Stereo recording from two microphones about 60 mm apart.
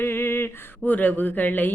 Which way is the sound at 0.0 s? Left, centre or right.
Left.